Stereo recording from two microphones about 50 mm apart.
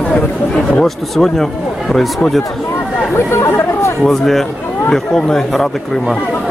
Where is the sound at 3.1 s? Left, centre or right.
Left.